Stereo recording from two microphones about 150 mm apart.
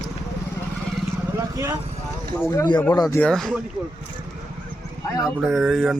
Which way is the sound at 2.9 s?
20° left (ahead or behind).